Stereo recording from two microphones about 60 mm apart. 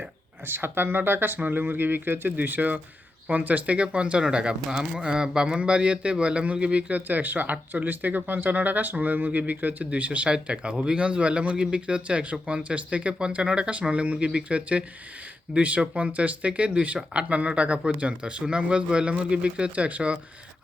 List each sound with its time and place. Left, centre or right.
0.4 s speech: right